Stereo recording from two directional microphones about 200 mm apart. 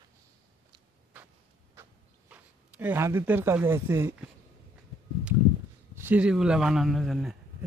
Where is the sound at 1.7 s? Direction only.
10° right (ahead or behind).